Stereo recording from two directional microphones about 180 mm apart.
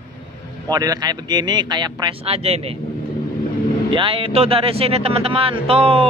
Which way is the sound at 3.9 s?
30° right (ahead or behind).